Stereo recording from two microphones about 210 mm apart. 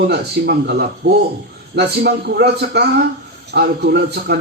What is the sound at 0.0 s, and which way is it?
A man's voice, 50° right (ahead or behind).